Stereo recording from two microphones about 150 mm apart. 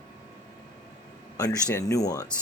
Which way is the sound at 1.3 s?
20° left (ahead or behind).